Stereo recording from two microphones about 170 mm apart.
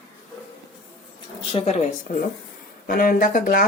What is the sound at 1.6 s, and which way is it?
Speech, 45° left (ahead or behind).